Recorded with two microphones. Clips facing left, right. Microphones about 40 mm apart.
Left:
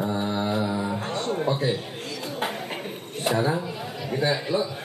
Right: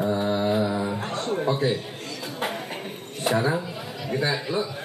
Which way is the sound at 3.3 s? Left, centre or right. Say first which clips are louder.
Right 1 dB; right.